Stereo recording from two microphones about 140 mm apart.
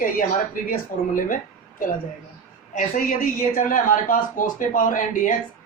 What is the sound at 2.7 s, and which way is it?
A woman's voice, 80° left.